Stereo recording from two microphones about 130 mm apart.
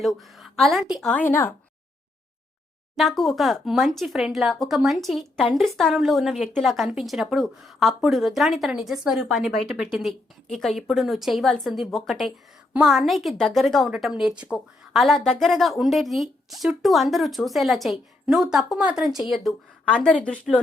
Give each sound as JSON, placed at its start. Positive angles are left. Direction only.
{"t": 0.0, "sound": "a woman's voice", "side_deg": 0}
{"t": 1.1, "sound": "speech", "side_deg": 15}
{"t": 2.9, "sound": "a woman's voice", "side_deg": 0}